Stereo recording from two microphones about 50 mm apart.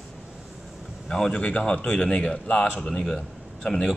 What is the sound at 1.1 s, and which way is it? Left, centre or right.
Speech, centre.